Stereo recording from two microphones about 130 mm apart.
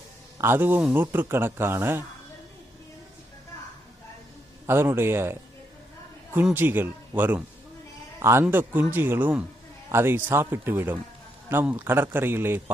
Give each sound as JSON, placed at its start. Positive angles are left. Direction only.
{"t": 0.3, "sound": "speech", "side_deg": -15}
{"t": 4.6, "sound": "speech", "side_deg": -20}